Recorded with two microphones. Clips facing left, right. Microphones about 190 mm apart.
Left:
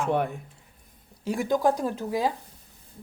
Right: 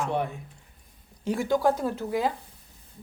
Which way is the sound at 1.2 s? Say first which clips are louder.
Even; 15° left (ahead or behind).